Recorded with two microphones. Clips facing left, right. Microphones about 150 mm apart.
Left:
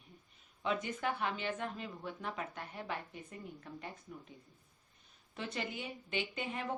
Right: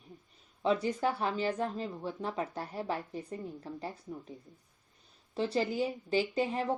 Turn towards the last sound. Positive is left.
turn(degrees=-35)  # may be behind; listen again after turning